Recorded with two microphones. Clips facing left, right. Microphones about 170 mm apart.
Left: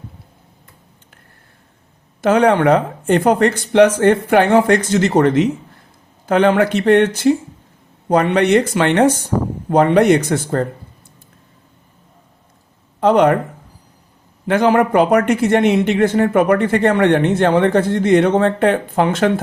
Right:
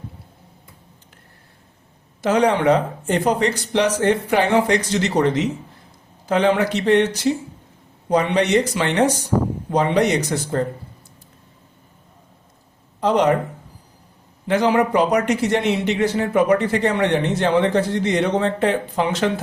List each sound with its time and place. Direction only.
2.2 s speech: 55° left (ahead or behind)
13.0 s speech: 60° left (ahead or behind)
14.4 s a man's voice: 55° left (ahead or behind)